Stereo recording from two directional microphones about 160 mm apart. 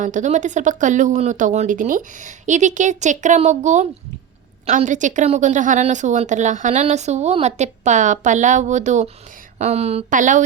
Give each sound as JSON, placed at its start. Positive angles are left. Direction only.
{"t": 0.0, "sound": "a woman's voice", "side_deg": -50}